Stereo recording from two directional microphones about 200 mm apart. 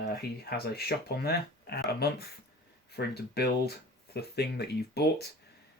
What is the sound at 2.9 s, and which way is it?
Speech, 55° left (ahead or behind).